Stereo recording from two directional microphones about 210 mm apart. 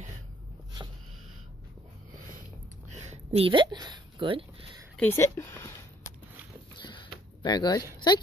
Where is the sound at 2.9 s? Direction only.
30° right (ahead or behind).